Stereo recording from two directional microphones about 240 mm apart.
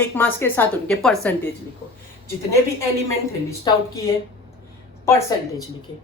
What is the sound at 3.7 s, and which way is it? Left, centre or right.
Speech, centre.